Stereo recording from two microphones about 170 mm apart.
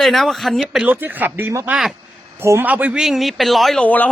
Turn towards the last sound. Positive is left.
turn(degrees=10)  # may be behind; listen again after turning